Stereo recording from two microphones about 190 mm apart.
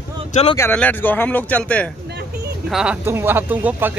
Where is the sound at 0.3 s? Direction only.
35° left (ahead or behind).